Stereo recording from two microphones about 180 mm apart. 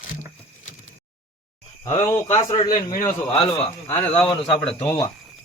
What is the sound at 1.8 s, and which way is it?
Speech, 15° left (ahead or behind).